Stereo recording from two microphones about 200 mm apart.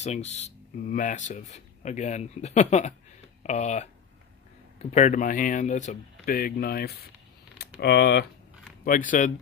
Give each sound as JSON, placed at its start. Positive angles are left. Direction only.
{"t": 0.0, "sound": "speech", "side_deg": 35}
{"t": 4.9, "sound": "speech", "side_deg": 35}
{"t": 8.8, "sound": "speech", "side_deg": 45}